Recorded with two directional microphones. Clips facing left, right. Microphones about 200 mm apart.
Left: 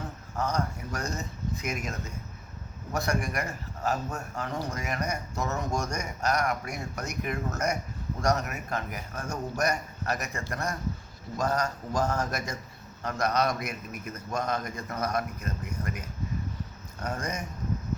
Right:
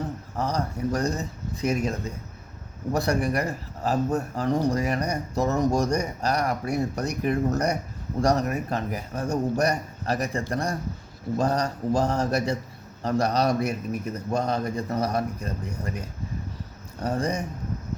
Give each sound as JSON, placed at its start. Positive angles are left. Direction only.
{"t": 0.3, "sound": "speech", "side_deg": -35}